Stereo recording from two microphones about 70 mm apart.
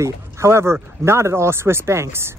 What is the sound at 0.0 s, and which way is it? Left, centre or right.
Speech, right.